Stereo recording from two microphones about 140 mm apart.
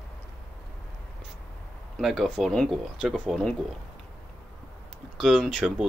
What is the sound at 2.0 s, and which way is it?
Speech, centre (ahead or behind).